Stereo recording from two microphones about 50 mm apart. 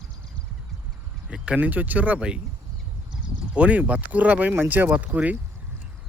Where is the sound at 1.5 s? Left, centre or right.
Right.